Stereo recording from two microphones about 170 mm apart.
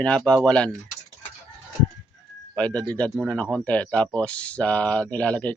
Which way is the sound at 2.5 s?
5° left (ahead or behind).